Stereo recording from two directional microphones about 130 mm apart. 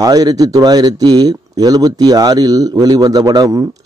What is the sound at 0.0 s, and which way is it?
A man's voice, 30° right (ahead or behind).